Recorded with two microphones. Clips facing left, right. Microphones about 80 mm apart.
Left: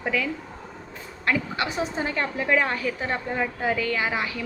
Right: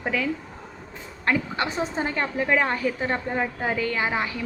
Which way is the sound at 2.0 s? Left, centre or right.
Right.